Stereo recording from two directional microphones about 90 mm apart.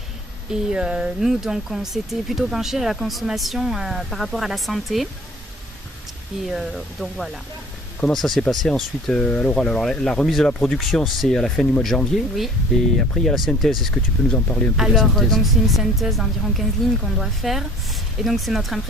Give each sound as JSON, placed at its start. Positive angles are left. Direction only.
{"t": 0.5, "sound": "speech", "side_deg": -10}
{"t": 6.5, "sound": "speech", "side_deg": 0}
{"t": 13.9, "sound": "speech", "side_deg": 15}
{"t": 14.8, "sound": "speech", "side_deg": -5}